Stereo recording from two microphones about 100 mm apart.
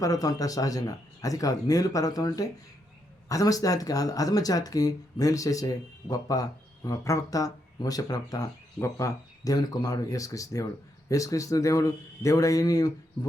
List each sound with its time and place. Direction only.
0.0 s speech: 35° left (ahead or behind)